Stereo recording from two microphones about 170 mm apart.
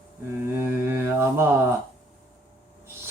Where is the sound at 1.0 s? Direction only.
15° right (ahead or behind).